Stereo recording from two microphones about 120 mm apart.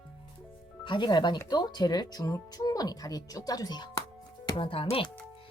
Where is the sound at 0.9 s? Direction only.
40° left (ahead or behind).